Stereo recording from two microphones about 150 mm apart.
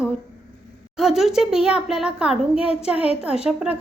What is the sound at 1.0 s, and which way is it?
Speech, centre (ahead or behind).